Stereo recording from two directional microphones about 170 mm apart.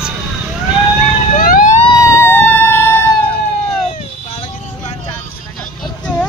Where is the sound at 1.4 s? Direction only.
55° left (ahead or behind).